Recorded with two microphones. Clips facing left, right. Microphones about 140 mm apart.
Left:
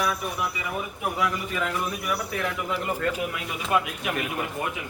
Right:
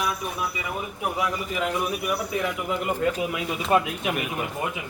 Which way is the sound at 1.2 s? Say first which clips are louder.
Even; 20° right (ahead or behind).